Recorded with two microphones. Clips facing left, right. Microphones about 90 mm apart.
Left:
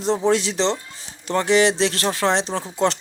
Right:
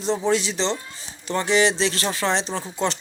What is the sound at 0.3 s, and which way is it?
Speech, 65° left (ahead or behind).